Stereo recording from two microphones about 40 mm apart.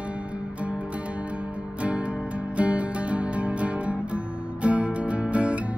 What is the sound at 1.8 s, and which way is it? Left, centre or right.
Music, right.